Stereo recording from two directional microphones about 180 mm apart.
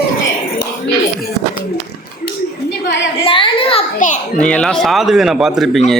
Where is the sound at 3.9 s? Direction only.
45° left (ahead or behind).